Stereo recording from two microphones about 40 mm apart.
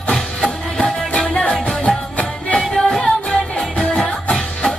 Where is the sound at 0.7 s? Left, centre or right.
Left.